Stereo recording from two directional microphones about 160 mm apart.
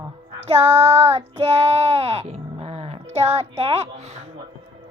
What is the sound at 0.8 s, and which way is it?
Music, 40° right (ahead or behind).